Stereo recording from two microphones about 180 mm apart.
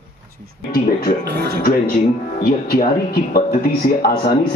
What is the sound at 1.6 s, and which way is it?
Speech, 55° left (ahead or behind).